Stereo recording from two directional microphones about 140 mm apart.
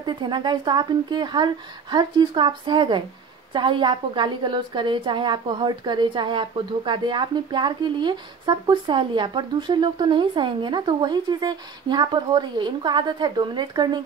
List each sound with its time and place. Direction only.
0.0 s a woman's voice: 35° right (ahead or behind)